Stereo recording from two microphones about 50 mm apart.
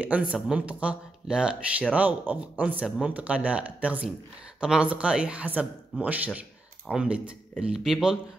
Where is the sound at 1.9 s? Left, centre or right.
Right.